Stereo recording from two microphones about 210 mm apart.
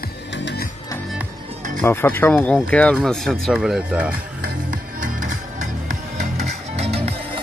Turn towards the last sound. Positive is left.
turn(degrees=-30)  # may be behind; listen again after turning